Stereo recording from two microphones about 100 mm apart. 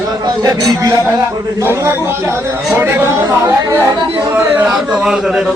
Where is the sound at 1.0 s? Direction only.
25° right (ahead or behind).